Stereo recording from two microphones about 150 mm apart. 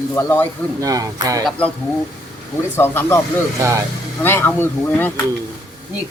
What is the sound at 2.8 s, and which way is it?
Speech, 15° left (ahead or behind).